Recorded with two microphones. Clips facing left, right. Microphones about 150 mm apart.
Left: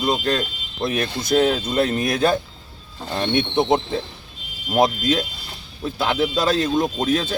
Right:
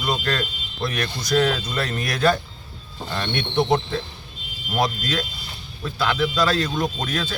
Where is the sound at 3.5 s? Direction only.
25° left (ahead or behind).